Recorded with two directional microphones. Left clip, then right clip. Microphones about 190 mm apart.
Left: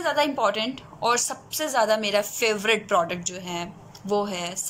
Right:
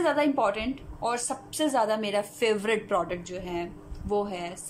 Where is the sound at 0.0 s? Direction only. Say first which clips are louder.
Left 2 dB; 15° right (ahead or behind).